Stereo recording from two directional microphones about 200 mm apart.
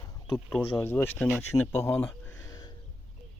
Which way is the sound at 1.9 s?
10° left (ahead or behind).